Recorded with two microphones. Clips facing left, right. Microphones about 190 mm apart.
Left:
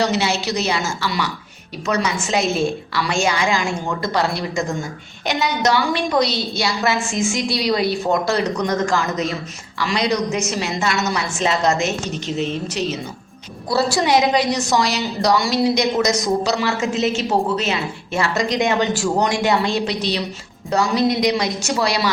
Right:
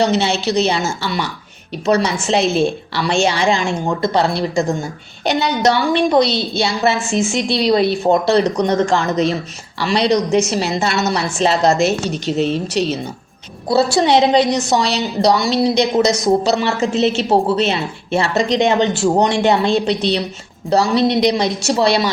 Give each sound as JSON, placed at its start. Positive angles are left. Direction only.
{"t": 0.2, "sound": "a woman's voice", "side_deg": -25}
{"t": 13.9, "sound": "a woman's voice", "side_deg": -30}